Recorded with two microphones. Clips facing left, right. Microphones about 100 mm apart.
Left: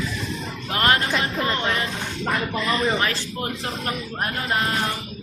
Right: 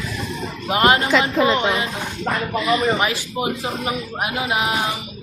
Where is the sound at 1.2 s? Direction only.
90° right.